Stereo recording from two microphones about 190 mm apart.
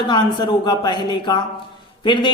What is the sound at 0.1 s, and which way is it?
A man's voice, 25° left (ahead or behind).